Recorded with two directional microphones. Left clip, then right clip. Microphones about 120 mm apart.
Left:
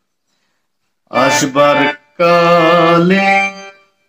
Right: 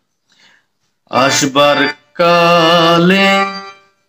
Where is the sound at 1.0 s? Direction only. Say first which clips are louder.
Even; 35° right (ahead or behind).